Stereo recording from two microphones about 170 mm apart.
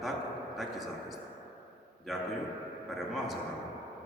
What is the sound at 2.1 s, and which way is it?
A man's voice, centre (ahead or behind).